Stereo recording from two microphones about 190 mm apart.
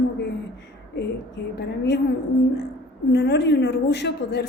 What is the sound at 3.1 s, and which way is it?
A woman's voice, 65° left (ahead or behind).